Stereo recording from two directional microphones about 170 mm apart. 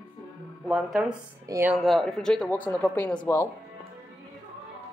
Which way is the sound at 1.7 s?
Centre (ahead or behind).